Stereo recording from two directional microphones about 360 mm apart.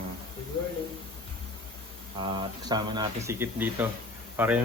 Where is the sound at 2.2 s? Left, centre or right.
Centre.